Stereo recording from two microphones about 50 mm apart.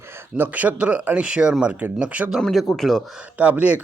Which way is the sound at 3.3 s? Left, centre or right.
Right.